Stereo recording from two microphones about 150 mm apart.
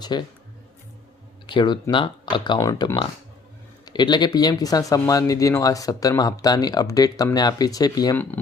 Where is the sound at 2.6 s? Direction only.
20° left (ahead or behind).